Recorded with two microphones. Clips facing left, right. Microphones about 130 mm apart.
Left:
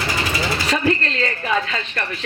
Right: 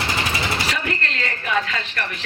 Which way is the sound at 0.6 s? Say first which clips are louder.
Left 6 dB; 30° left (ahead or behind).